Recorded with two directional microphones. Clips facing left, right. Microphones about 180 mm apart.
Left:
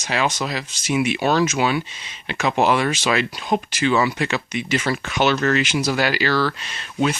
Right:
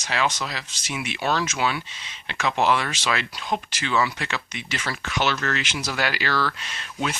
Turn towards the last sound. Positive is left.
turn(degrees=0)  # may be behind; listen again after turning